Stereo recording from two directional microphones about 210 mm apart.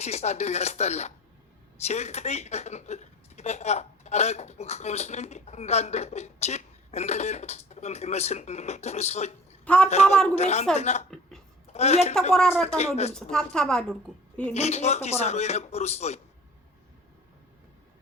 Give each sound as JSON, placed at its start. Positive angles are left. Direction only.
{"t": 0.0, "sound": "a woman's voice", "side_deg": 30}
{"t": 9.6, "sound": "a woman's voice", "side_deg": 5}
{"t": 10.3, "sound": "a woman's voice", "side_deg": 30}
{"t": 12.3, "sound": "a woman's voice", "side_deg": 0}
{"t": 12.6, "sound": "a woman's voice", "side_deg": 30}
{"t": 13.3, "sound": "a woman's voice", "side_deg": 0}
{"t": 14.5, "sound": "a woman's voice", "side_deg": 30}